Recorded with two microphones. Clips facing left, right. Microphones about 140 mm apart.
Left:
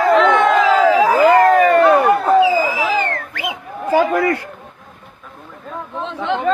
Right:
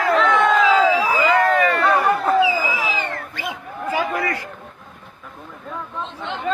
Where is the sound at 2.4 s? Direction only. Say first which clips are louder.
Left 5 dB; 50° left (ahead or behind).